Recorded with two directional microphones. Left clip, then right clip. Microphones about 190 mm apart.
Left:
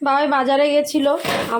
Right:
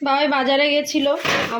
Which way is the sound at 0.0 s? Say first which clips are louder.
Left 1 dB; 15° left (ahead or behind).